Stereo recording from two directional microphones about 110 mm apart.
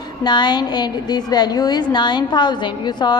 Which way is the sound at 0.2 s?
40° left (ahead or behind).